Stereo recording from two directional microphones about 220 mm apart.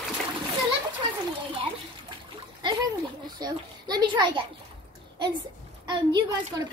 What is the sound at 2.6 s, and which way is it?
A child's voice, 20° right (ahead or behind).